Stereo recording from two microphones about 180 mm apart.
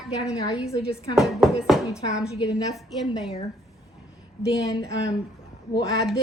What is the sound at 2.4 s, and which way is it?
Speech, 20° left (ahead or behind).